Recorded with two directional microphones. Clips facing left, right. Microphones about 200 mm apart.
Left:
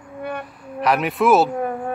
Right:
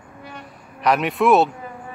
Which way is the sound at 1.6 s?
60° left (ahead or behind).